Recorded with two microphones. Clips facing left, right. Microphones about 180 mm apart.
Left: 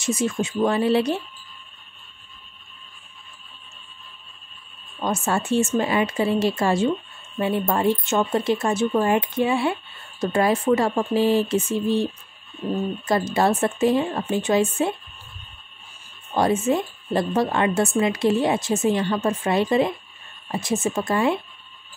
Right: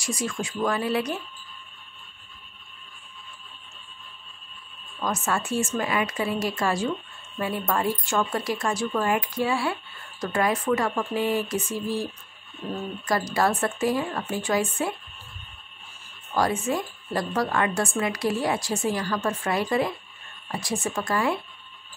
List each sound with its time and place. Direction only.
0.0 s speech: 25° left (ahead or behind)
5.0 s speech: 30° left (ahead or behind)
16.3 s speech: 25° left (ahead or behind)